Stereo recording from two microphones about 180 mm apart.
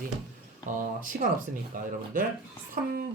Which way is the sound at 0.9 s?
50° right (ahead or behind).